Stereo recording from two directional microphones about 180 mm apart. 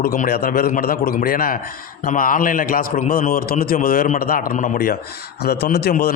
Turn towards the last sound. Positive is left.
turn(degrees=60)  # may be behind; listen again after turning